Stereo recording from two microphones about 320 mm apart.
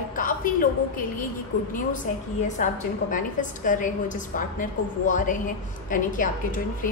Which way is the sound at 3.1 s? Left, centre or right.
Left.